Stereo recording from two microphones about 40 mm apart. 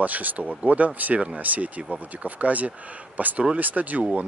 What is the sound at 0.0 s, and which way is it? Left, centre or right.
A man's voice, right.